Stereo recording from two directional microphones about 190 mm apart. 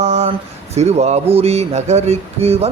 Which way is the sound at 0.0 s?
35° right (ahead or behind).